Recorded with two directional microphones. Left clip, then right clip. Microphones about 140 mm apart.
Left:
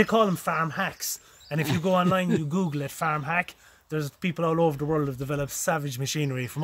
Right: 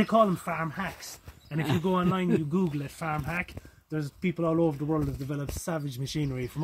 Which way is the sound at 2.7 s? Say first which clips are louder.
Left 5 dB; 30° left (ahead or behind).